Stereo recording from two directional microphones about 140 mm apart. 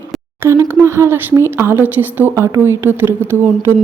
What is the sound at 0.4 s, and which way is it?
A woman's voice, 20° right (ahead or behind).